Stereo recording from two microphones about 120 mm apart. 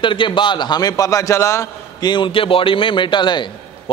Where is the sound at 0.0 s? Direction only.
45° left (ahead or behind); by 2.0 s 25° left (ahead or behind).